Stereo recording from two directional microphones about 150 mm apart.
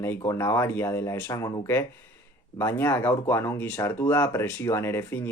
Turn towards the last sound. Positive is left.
turn(degrees=15)  # may be behind; listen again after turning